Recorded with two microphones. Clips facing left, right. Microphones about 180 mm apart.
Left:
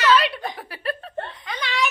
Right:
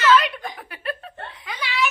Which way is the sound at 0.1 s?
35° left (ahead or behind).